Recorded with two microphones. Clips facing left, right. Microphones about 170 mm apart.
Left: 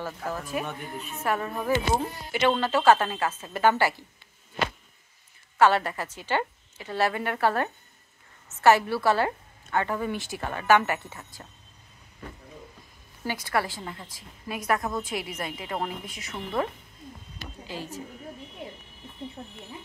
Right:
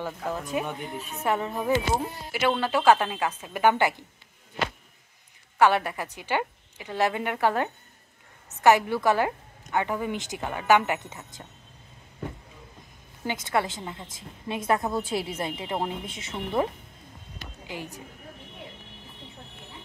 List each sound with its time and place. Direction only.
0.0 s a woman's voice: 15° right (ahead or behind)
5.6 s a woman's voice: 15° right (ahead or behind)
13.2 s a woman's voice: 20° right (ahead or behind)
17.6 s a woman's voice: 15° right (ahead or behind)